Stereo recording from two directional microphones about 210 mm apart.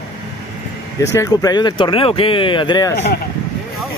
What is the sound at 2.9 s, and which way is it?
Speech, 55° left (ahead or behind).